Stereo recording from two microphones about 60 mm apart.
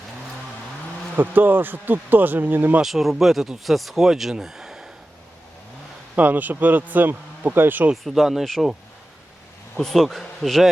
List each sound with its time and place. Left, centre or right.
1.1 s speech: right
2.8 s speech: centre
6.1 s speech: right
8.0 s speech: centre
9.7 s speech: centre